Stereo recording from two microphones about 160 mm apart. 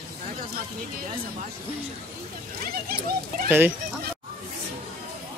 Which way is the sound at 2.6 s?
65° right (ahead or behind).